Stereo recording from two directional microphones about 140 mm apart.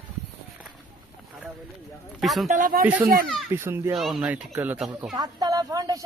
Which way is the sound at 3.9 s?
Centre (ahead or behind).